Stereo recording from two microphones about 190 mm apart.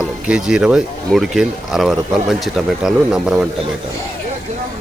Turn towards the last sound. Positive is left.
turn(degrees=0)  # may be behind; listen again after turning